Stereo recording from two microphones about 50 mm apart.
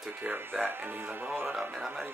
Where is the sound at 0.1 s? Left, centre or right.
Right.